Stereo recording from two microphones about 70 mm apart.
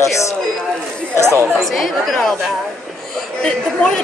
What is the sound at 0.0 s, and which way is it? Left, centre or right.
Speech, left.